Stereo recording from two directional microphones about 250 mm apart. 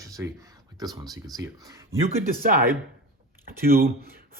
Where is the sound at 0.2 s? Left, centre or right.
Centre.